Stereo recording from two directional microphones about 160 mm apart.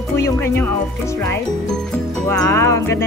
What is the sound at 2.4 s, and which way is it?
Speech, 20° left (ahead or behind).